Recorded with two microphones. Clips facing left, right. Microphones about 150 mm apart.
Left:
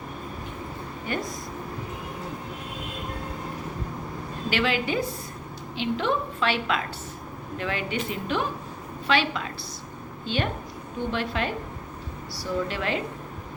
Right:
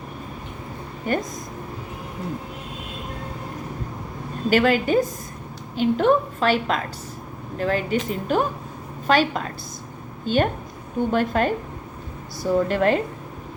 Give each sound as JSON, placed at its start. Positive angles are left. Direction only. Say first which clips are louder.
{"t": 1.1, "sound": "a woman's voice", "louder": "right 7 dB", "side_deg": -45}
{"t": 4.4, "sound": "a woman's voice", "louder": "right 7 dB", "side_deg": -45}